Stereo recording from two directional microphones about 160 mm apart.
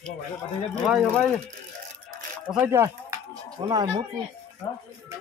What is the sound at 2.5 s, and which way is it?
Speech, 15° right (ahead or behind).